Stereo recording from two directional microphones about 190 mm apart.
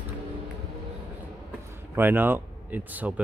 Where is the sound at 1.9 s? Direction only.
10° right (ahead or behind).